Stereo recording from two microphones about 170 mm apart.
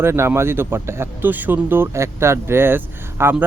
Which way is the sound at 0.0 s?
15° right (ahead or behind).